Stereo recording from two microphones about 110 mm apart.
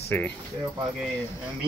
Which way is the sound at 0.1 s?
15° left (ahead or behind).